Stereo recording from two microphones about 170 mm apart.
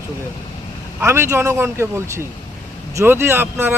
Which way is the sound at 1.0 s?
15° right (ahead or behind).